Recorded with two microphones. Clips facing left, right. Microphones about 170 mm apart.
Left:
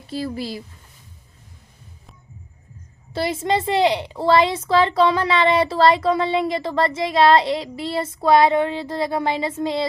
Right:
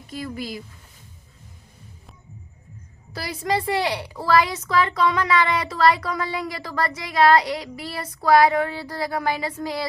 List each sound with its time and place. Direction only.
0.1 s speech: 30° left (ahead or behind)
3.1 s a woman's voice: 25° left (ahead or behind)